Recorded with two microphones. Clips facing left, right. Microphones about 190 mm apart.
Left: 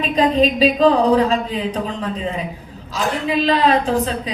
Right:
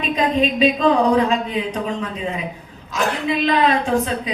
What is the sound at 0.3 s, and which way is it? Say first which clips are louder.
A woman's voice: left 1 dB; 35° left (ahead or behind).